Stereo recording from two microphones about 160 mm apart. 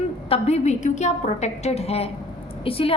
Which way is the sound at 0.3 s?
45° left (ahead or behind).